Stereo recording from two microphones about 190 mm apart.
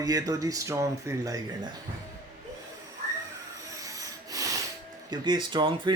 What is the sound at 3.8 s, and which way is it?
Wood, 20° right (ahead or behind).